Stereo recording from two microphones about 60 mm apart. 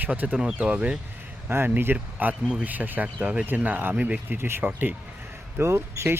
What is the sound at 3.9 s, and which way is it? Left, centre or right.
Speech, centre.